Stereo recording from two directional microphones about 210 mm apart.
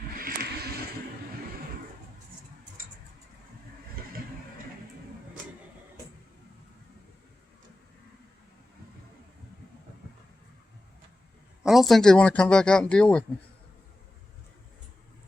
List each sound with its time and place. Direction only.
0.2 s vehicle: 45° right (ahead or behind)
11.6 s speech: centre (ahead or behind)